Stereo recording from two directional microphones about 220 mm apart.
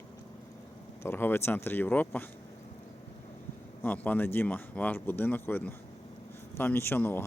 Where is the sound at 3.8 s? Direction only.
10° left (ahead or behind).